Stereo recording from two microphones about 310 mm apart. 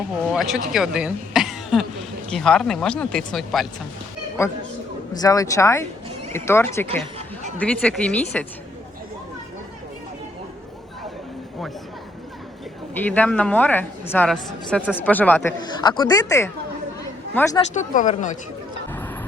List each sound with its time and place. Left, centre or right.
0.3 s speech: centre
13.1 s speech: centre
17.7 s speech: left